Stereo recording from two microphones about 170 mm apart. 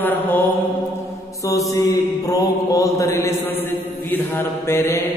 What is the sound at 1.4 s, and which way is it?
Mantra, 20° left (ahead or behind).